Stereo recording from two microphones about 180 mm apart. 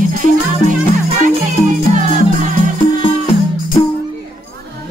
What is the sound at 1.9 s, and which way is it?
Music, 45° right (ahead or behind).